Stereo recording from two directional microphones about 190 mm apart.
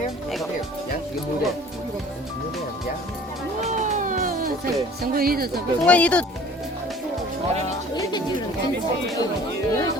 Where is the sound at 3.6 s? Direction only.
40° right (ahead or behind).